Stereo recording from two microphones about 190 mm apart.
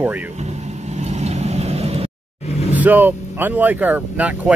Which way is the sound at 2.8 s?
10° right (ahead or behind).